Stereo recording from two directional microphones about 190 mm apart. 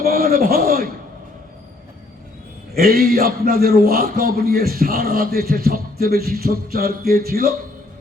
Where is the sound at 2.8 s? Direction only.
55° right (ahead or behind).